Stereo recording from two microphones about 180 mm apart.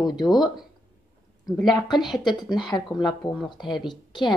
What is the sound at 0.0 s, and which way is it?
Speech, 25° left (ahead or behind).